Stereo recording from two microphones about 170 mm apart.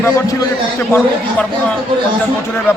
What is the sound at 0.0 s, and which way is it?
Speech, 20° left (ahead or behind).